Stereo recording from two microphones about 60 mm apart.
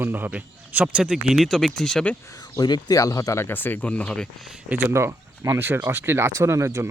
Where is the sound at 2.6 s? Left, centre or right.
Left.